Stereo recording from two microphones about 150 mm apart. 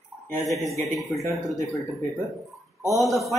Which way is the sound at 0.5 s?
20° left (ahead or behind).